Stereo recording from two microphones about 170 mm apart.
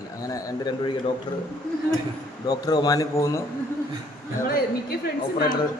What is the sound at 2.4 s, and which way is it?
Speech, 25° left (ahead or behind).